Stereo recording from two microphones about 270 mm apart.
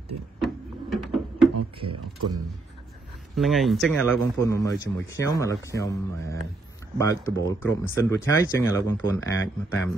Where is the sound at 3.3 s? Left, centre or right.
Centre.